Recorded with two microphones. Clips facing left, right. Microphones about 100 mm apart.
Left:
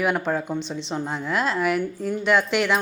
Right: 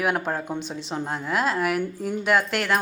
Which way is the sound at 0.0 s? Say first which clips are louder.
Left 2 dB; centre (ahead or behind).